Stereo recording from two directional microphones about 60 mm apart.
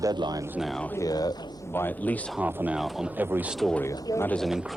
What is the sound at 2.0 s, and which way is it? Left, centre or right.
Speech, left.